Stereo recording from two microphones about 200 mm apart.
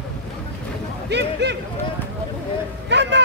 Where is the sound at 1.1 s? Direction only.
55° right (ahead or behind).